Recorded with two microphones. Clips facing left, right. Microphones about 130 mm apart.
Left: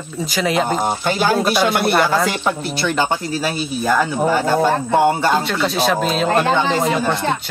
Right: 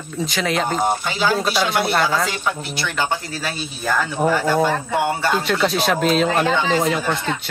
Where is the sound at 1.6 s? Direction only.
55° left (ahead or behind).